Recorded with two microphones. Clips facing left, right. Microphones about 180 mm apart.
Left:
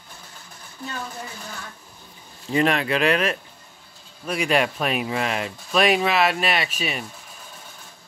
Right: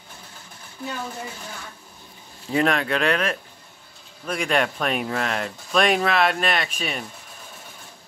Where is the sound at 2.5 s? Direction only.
Centre (ahead or behind).